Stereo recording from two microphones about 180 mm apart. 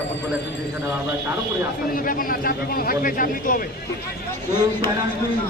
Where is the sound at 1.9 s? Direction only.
50° left (ahead or behind).